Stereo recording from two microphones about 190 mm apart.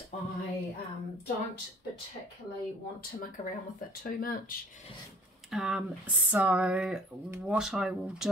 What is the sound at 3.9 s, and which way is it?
Speech, 45° left (ahead or behind).